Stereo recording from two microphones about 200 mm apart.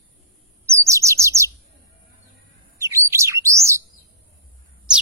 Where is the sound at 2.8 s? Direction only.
15° right (ahead or behind).